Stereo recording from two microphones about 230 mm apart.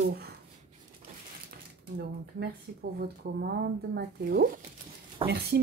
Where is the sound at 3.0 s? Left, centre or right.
Right.